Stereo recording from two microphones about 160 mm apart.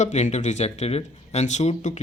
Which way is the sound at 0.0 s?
45° left (ahead or behind).